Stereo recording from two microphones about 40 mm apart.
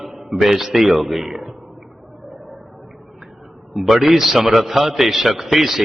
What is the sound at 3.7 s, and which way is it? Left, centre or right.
A man's voice, centre.